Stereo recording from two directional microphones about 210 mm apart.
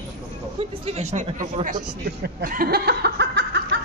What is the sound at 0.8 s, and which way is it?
Speech, 30° right (ahead or behind).